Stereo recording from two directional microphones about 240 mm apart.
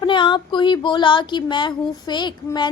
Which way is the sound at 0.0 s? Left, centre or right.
Centre.